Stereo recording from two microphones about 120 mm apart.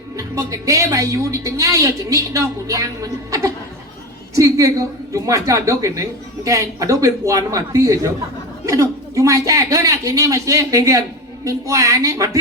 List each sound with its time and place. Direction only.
0.2 s a woman's voice: 25° right (ahead or behind)